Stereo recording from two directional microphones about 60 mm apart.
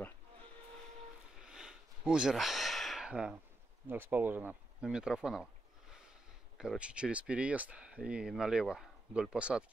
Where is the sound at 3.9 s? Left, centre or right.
Right.